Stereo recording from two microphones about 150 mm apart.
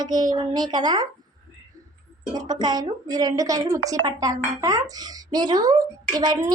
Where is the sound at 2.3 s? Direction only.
25° right (ahead or behind).